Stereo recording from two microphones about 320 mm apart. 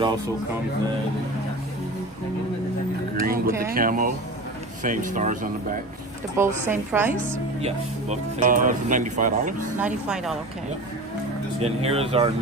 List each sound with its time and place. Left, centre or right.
3.2 s a sound: right
3.7 s speech: right
6.3 s a woman's voice: centre
7.6 s speech: centre
9.8 s speech: centre
11.6 s speech: centre